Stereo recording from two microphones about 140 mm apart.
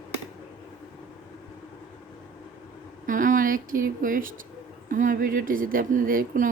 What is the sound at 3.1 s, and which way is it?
Speech, 70° right (ahead or behind).